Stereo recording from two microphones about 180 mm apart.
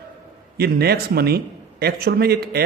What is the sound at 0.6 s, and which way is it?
A man's voice, 60° right (ahead or behind).